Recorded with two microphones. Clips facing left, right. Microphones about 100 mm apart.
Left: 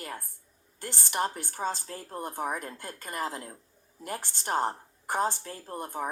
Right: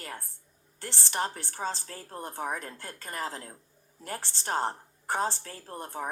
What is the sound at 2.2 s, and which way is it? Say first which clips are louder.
A woman's voice: left 1 dB; 10° left (ahead or behind).